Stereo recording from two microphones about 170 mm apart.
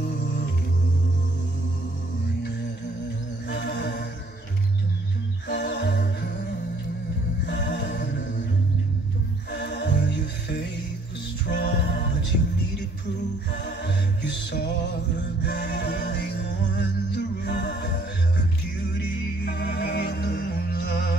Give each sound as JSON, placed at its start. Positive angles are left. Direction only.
{"t": 3.4, "sound": "music", "side_deg": 90}
{"t": 5.5, "sound": "music", "side_deg": 90}
{"t": 7.4, "sound": "music", "side_deg": 90}
{"t": 9.5, "sound": "music", "side_deg": 90}
{"t": 11.4, "sound": "a capella", "side_deg": 90}
{"t": 13.5, "sound": "music", "side_deg": 90}
{"t": 18.9, "sound": "music", "side_deg": 90}